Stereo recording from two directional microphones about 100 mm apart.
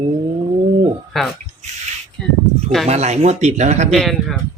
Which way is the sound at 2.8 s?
90° right.